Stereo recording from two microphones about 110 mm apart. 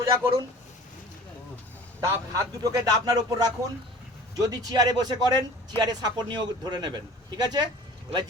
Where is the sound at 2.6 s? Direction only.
35° right (ahead or behind).